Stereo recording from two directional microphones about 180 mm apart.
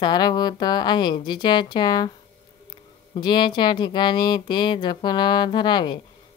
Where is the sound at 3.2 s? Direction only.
25° left (ahead or behind).